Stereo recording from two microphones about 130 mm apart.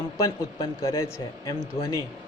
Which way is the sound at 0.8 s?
20° left (ahead or behind).